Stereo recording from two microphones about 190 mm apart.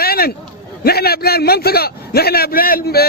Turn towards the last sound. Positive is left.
turn(degrees=55)  # may be behind; listen again after turning